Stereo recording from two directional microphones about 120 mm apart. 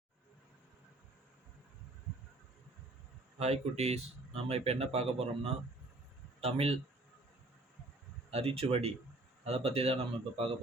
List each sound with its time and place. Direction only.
3.3 s speech: 60° right (ahead or behind)
8.3 s speech: 55° right (ahead or behind)